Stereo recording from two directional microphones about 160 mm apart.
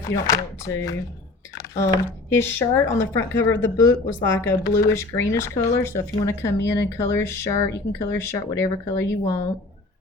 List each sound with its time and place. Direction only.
0.1 s speech: 20° left (ahead or behind)
1.5 s a sound: 20° left (ahead or behind)
2.3 s speech: 15° left (ahead or behind)